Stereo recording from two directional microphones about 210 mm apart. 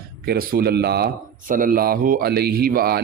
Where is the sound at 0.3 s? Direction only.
45° right (ahead or behind).